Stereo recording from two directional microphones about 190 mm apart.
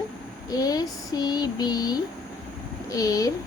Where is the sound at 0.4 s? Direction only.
20° left (ahead or behind).